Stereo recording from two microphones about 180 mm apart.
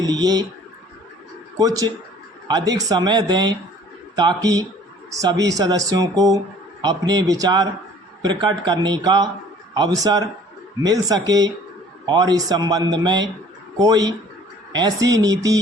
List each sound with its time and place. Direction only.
0.0 s speech: 20° right (ahead or behind)
1.5 s speech: 20° right (ahead or behind)